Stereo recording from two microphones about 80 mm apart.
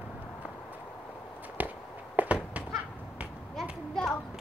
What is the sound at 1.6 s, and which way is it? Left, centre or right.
Walk, right.